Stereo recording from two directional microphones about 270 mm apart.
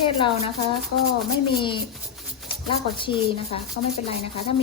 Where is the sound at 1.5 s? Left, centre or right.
Centre.